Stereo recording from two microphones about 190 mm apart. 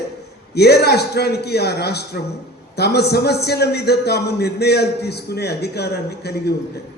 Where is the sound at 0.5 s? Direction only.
60° left (ahead or behind).